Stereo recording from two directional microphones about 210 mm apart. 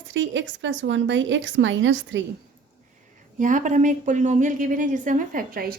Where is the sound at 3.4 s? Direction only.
35° right (ahead or behind).